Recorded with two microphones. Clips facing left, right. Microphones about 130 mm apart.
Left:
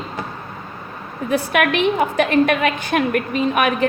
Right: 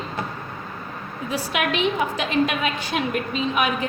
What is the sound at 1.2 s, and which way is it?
A woman's voice, 60° left (ahead or behind).